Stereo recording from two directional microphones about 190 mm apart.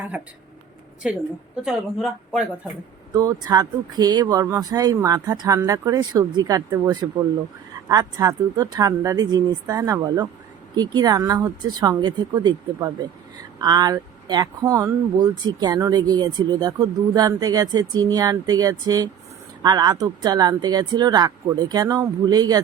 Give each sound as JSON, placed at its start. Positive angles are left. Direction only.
{"t": 1.0, "sound": "speech", "side_deg": -5}
{"t": 3.2, "sound": "speech", "side_deg": -20}